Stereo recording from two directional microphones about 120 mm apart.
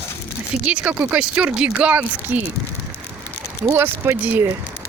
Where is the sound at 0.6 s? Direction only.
10° right (ahead or behind).